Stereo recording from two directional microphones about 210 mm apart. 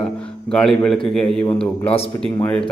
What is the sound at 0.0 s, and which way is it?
A man's voice, 5° left (ahead or behind).